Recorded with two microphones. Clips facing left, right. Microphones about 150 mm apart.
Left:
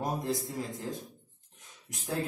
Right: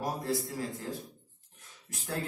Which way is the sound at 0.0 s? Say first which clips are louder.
Even; 20° left (ahead or behind).